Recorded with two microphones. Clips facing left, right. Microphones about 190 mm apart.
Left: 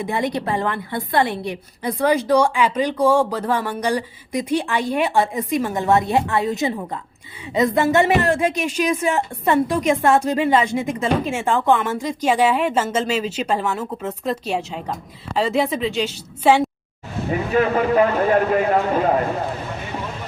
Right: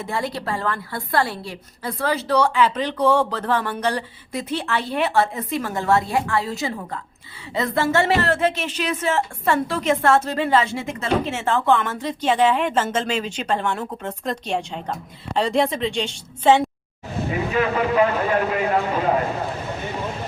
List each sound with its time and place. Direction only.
0.0 s a woman's voice: 20° left (ahead or behind)
17.5 s a man's voice: 45° left (ahead or behind)